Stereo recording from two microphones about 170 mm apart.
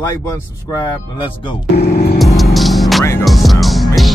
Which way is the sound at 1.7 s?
65° left (ahead or behind).